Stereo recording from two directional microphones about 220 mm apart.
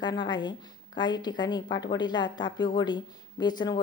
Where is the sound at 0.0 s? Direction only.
20° left (ahead or behind).